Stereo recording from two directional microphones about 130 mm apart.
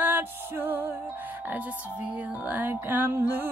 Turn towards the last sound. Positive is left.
turn(degrees=-15)  # may be behind; listen again after turning